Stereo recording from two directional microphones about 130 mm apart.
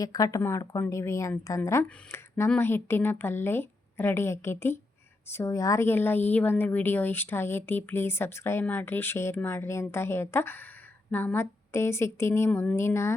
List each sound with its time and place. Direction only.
0.0 s a woman's voice: 30° left (ahead or behind)
12.5 s a woman's voice: 10° left (ahead or behind)
12.7 s a woman's voice: 20° left (ahead or behind)